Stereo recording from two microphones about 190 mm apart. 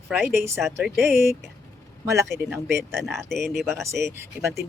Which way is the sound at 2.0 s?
15° right (ahead or behind).